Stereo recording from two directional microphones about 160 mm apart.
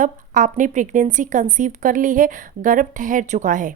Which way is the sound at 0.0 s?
50° right (ahead or behind).